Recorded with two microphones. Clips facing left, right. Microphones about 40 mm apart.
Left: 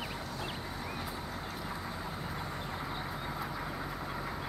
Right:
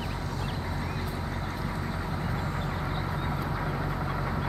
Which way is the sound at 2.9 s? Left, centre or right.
Right.